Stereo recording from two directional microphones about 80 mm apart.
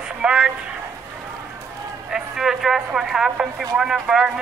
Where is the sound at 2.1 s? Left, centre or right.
Centre.